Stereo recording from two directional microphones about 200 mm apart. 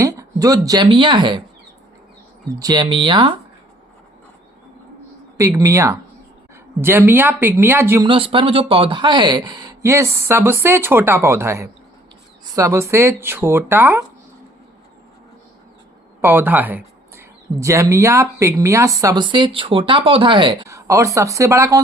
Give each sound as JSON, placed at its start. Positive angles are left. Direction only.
{"t": 0.0, "sound": "speech", "side_deg": -15}
{"t": 2.6, "sound": "speech", "side_deg": -20}
{"t": 5.4, "sound": "speech", "side_deg": -15}
{"t": 8.0, "sound": "speech", "side_deg": -25}
{"t": 16.2, "sound": "speech", "side_deg": -10}